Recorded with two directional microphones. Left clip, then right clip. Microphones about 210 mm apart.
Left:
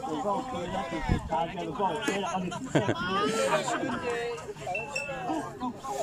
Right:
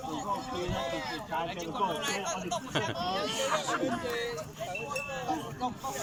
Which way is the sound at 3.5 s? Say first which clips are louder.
Left 2 dB; 10° left (ahead or behind).